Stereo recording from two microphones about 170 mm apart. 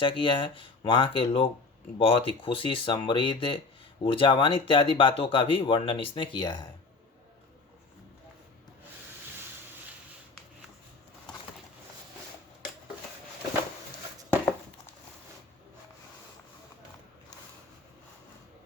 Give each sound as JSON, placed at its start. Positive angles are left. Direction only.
{"t": 0.0, "sound": "speech", "side_deg": 30}